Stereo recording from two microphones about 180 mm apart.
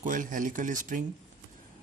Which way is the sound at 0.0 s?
45° right (ahead or behind).